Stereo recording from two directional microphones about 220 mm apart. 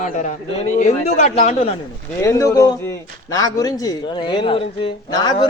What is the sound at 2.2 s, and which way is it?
A man's voice, 15° left (ahead or behind).